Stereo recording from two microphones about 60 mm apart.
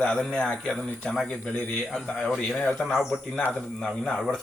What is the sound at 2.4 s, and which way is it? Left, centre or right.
Speech, centre.